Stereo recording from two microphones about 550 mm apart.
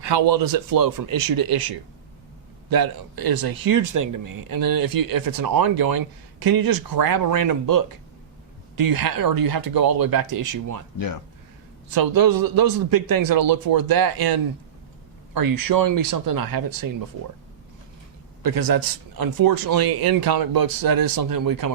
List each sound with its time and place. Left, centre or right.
0.0 s speech: right
11.9 s speech: right
15.4 s speech: right
18.4 s speech: right